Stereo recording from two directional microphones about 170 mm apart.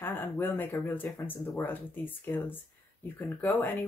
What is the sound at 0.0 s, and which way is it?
Speech, 10° left (ahead or behind).